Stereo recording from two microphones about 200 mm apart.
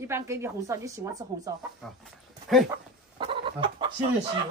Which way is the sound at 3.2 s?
25° right (ahead or behind).